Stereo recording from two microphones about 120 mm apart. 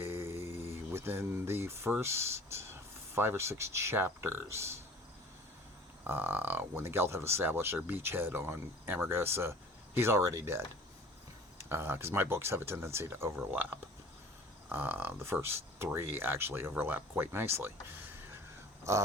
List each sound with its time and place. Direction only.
0.0 s mantra: 20° right (ahead or behind)
0.9 s speech: 20° right (ahead or behind)
6.1 s speech: 20° right (ahead or behind)